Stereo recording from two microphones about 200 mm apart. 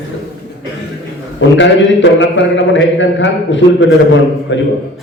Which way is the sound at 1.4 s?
65° left (ahead or behind).